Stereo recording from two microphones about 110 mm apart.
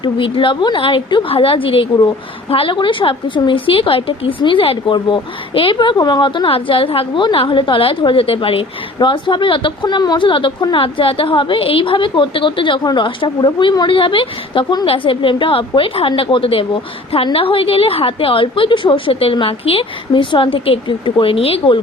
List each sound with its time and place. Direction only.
0.0 s a woman's voice: 50° left (ahead or behind)